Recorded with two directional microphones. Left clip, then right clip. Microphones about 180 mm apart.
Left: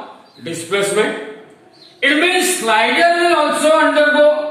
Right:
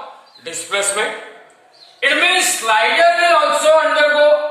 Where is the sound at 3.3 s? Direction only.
Centre (ahead or behind).